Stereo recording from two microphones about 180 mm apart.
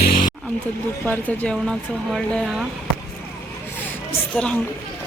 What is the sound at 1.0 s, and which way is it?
Speech, 10° left (ahead or behind).